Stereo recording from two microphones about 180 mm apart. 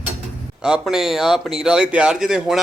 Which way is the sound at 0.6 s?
5° right (ahead or behind).